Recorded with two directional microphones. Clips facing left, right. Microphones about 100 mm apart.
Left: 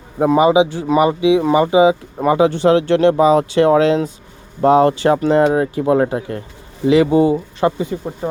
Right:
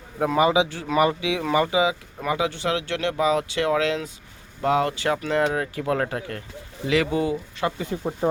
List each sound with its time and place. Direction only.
0.2 s speech: 20° left (ahead or behind)
8.2 s speech: 15° right (ahead or behind)